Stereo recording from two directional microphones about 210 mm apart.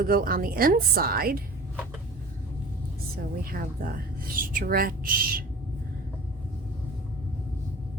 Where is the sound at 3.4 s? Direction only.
45° right (ahead or behind).